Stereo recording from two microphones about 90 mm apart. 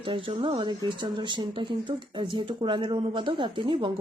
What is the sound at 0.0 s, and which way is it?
Speech, 80° right.